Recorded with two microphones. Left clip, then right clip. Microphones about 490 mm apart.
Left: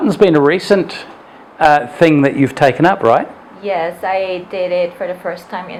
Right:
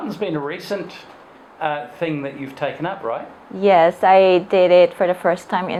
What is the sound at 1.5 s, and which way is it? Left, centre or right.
A man's voice, left.